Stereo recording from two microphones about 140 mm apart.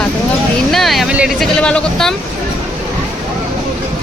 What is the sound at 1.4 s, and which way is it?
Speech, 5° left (ahead or behind).